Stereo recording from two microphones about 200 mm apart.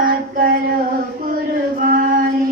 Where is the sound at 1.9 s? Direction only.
45° right (ahead or behind).